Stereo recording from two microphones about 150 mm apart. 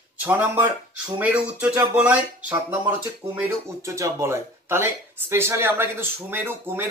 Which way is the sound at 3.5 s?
20° right (ahead or behind).